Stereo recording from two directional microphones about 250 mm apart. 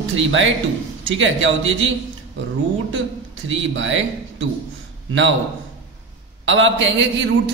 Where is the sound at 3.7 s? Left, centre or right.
Right.